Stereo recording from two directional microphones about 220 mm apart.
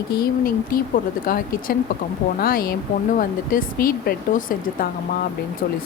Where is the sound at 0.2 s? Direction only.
40° left (ahead or behind).